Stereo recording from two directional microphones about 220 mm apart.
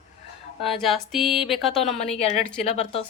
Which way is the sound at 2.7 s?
30° left (ahead or behind).